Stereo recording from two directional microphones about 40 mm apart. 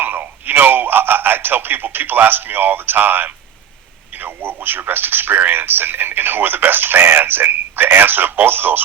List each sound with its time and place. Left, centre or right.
0.0 s radio: right
4.1 s speech: right